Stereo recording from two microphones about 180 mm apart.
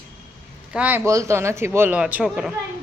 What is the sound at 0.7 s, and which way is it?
A man's voice, 10° right (ahead or behind).